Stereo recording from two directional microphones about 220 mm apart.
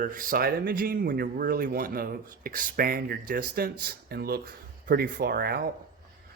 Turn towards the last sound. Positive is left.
turn(degrees=-45)  # may be behind; listen again after turning